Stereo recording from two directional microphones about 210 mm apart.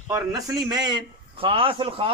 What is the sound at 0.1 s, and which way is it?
A man's voice, 15° right (ahead or behind).